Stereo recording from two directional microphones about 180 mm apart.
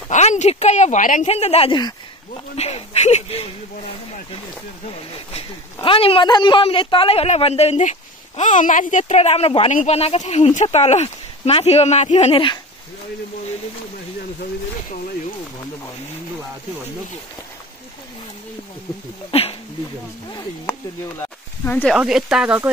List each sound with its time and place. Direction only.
0.1 s speech: 40° left (ahead or behind); by 2.4 s 25° left (ahead or behind)
2.5 s speech: 35° left (ahead or behind)
5.1 s speech: 30° left (ahead or behind)
20.2 s a sound: 15° left (ahead or behind)
21.9 s speech: 5° right (ahead or behind)